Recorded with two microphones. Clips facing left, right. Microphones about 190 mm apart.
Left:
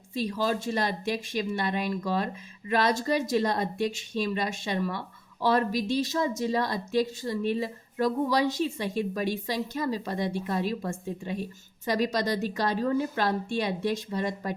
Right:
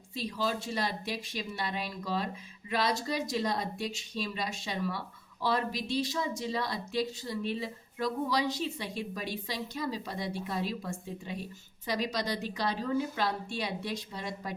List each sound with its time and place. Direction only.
0.1 s speech: 50° left (ahead or behind)